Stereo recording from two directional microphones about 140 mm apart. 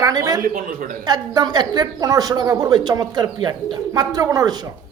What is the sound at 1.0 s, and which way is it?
A woman's voice, 30° right (ahead or behind).